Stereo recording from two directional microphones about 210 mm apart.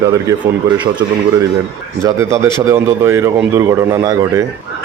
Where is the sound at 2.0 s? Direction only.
15° right (ahead or behind).